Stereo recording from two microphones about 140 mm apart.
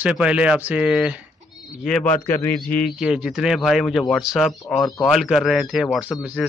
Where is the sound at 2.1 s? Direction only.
15° left (ahead or behind).